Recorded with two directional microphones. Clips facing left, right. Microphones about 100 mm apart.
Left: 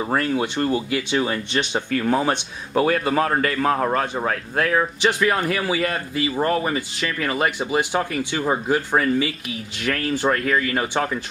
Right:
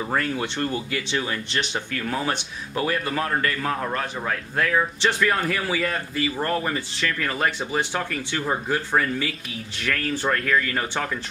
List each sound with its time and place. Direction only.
0.3 s a man's voice: 20° left (ahead or behind)
2.0 s a man's voice: 30° left (ahead or behind)
4.7 s speech: 15° left (ahead or behind)